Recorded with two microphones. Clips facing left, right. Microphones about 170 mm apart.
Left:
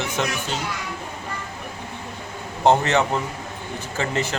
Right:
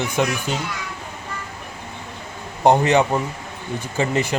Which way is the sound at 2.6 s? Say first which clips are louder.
Right 3 dB; 15° right (ahead or behind).